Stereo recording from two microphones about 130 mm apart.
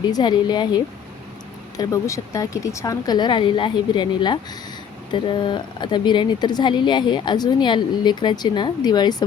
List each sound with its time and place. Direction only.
0.1 s speech: 35° left (ahead or behind)
1.7 s speech: 25° left (ahead or behind)